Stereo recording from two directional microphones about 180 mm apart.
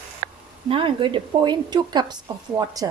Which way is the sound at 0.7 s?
30° right (ahead or behind).